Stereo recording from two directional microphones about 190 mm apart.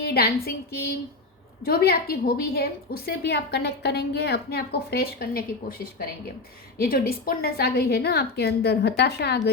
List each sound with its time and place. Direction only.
0.0 s a woman's voice: 55° left (ahead or behind)